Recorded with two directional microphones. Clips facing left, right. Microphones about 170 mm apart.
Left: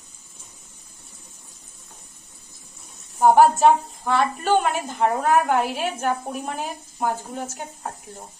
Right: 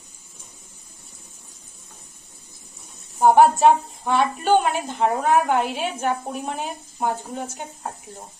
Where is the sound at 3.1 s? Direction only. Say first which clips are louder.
Even; centre (ahead or behind).